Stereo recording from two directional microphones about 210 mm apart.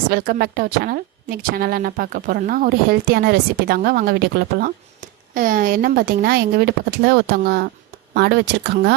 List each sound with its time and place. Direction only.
0.1 s a woman's voice: 45° right (ahead or behind)